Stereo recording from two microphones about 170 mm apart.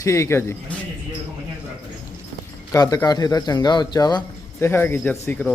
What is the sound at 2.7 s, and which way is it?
Speech, 20° left (ahead or behind).